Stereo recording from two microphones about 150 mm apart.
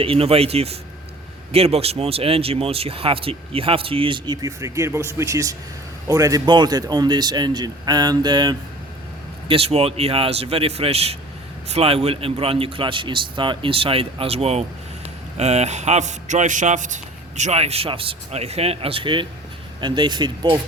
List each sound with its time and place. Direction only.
0.0 s speech: 40° right (ahead or behind)
9.5 s a man's voice: 40° right (ahead or behind)